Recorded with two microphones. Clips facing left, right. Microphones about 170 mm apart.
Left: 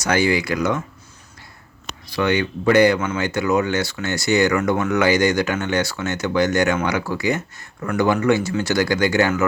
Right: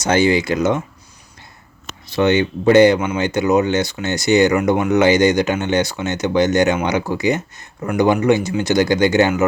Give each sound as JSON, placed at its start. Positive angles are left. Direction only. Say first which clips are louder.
{"t": 0.0, "sound": "speech", "louder": "right 4 dB", "side_deg": -20}
{"t": 2.0, "sound": "speech", "louder": "right 5 dB", "side_deg": -25}